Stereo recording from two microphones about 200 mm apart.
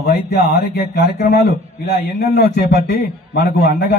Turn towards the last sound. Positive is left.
turn(degrees=60)  # may be behind; listen again after turning